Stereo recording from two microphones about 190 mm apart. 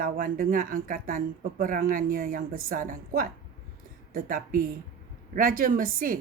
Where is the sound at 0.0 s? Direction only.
45° right (ahead or behind).